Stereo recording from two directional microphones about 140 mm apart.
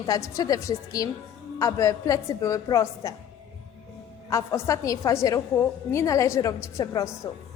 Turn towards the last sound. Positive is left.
turn(degrees=20)  # may be behind; listen again after turning